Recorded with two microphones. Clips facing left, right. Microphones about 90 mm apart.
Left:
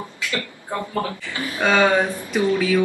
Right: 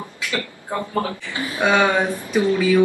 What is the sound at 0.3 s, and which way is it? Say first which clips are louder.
A man's voice: right 2 dB; 20° right (ahead or behind).